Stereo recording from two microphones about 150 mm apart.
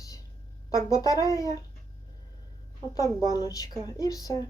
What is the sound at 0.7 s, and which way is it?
Speech, 20° left (ahead or behind).